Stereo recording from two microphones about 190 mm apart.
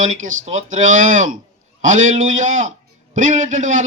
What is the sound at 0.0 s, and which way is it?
Speech, 40° right (ahead or behind).